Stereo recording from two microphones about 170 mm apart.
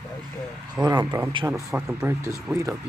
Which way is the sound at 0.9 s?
25° right (ahead or behind).